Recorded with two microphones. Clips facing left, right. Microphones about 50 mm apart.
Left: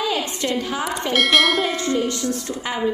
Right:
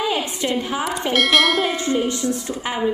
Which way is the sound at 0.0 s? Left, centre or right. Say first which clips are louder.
Right 1 dB; centre.